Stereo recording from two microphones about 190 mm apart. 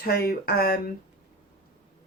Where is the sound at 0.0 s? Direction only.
50° left (ahead or behind).